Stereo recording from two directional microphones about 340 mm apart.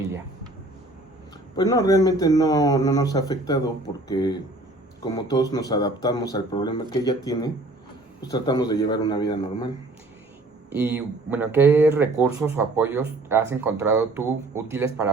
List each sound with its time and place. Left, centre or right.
1.5 s speech: centre
10.7 s speech: centre